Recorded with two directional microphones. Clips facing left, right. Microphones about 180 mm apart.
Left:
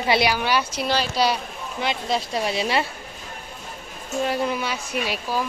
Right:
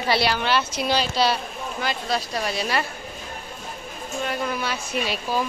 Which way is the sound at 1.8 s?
25° left (ahead or behind).